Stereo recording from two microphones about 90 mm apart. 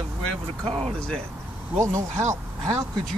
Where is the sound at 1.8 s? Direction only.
35° right (ahead or behind).